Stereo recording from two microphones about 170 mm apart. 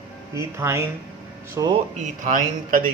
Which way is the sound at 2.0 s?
50° right (ahead or behind).